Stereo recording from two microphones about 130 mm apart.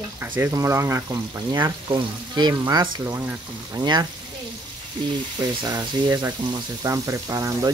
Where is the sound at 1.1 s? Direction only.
30° right (ahead or behind).